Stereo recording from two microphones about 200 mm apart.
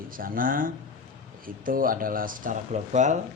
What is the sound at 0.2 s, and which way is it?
Speech, 45° right (ahead or behind).